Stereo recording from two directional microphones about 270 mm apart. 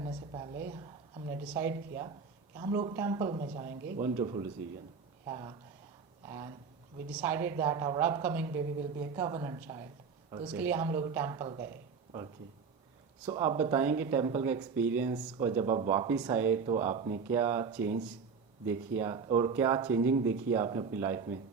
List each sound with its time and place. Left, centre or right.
0.0 s a woman's voice: centre
6.2 s a sound: centre
7.1 s speech: centre
13.2 s speech: centre